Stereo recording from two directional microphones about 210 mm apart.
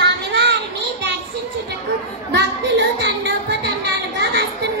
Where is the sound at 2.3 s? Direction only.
55° right (ahead or behind).